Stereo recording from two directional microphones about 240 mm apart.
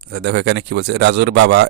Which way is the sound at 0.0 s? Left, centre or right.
Right.